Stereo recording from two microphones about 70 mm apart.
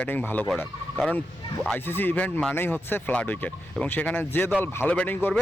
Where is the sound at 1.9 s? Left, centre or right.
Left.